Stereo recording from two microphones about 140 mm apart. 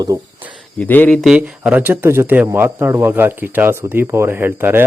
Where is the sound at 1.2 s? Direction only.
10° right (ahead or behind).